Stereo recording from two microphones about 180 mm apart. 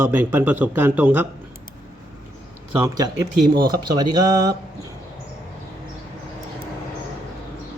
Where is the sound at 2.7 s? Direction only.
20° right (ahead or behind).